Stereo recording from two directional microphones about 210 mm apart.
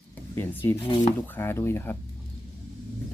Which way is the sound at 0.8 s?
25° left (ahead or behind).